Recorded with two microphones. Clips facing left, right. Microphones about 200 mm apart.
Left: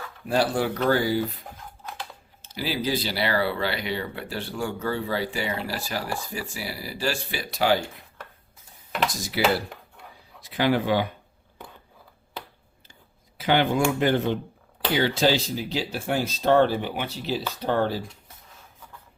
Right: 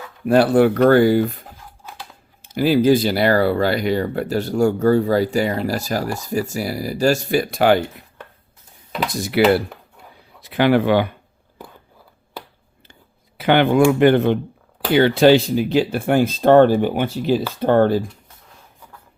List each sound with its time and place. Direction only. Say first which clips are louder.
0.3 s speech: right 10 dB; 60° right (ahead or behind)
2.5 s speech: right 13 dB; 50° right (ahead or behind)
9.0 s speech: right 11 dB; 60° right (ahead or behind)
10.4 s speech: right 7 dB; 65° right (ahead or behind)
12.9 s a sound: right 4 dB; 65° right (ahead or behind)
14.9 s speech: right 10 dB; 60° right (ahead or behind)